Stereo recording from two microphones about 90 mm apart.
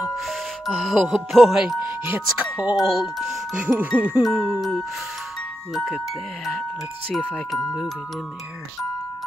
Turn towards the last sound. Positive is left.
turn(degrees=5)  # may be behind; listen again after turning